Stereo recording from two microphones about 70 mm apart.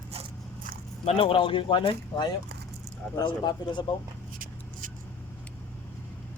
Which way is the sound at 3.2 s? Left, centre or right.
Left.